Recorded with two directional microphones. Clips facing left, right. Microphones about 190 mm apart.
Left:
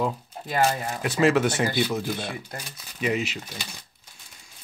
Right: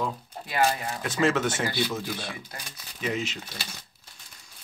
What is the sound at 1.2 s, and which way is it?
Speech, 15° left (ahead or behind).